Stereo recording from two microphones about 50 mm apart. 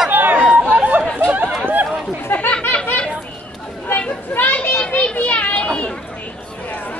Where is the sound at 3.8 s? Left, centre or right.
Left.